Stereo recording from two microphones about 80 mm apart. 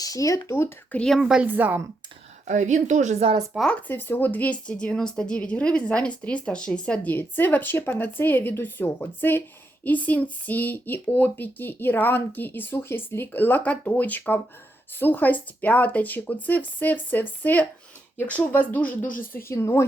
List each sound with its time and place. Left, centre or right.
0.0 s speech: left
0.5 s speech: left
0.9 s a woman's voice: centre
1.2 s a woman's voice: centre
1.5 s speech: right
3.8 s speech: left
19.5 s a woman's voice: left